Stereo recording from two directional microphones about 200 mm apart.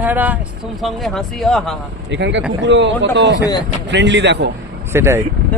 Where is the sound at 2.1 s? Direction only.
60° right (ahead or behind).